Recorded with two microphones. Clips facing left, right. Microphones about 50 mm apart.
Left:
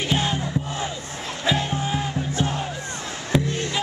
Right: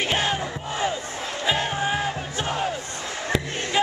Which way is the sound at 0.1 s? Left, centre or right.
Right.